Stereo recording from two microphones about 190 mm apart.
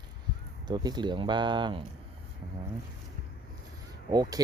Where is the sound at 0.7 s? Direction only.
20° right (ahead or behind).